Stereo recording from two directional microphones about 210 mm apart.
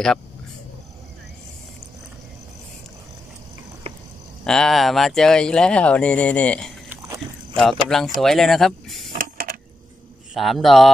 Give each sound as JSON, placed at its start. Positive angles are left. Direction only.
{"t": 4.5, "sound": "speech", "side_deg": 0}
{"t": 9.2, "sound": "coin", "side_deg": -45}
{"t": 10.3, "sound": "speech", "side_deg": 0}